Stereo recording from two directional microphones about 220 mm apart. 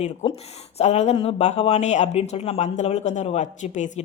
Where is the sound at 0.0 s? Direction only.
30° left (ahead or behind).